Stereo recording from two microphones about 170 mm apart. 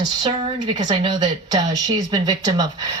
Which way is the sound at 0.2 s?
30° right (ahead or behind).